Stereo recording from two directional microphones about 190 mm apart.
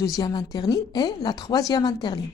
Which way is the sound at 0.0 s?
20° left (ahead or behind).